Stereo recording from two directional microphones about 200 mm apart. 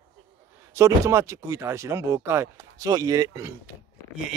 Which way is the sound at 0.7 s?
15° right (ahead or behind).